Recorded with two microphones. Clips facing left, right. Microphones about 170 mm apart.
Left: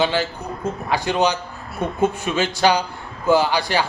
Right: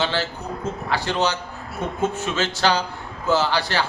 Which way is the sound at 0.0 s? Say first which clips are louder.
Left 4 dB; 15° left (ahead or behind).